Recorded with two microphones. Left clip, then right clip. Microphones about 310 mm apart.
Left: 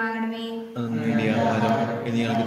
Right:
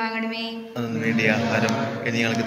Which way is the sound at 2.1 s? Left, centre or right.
Centre.